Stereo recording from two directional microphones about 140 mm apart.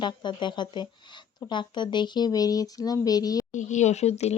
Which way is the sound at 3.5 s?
55° left (ahead or behind).